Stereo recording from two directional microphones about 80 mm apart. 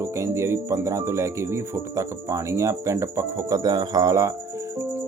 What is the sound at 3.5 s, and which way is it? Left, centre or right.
Music, right.